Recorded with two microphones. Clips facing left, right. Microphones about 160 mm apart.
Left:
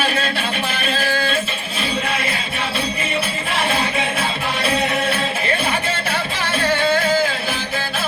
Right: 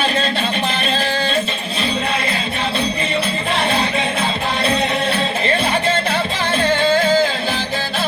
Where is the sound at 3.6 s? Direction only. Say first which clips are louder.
Right 1 dB; 30° right (ahead or behind).